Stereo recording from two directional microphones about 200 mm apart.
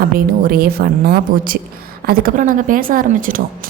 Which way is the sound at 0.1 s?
50° right (ahead or behind).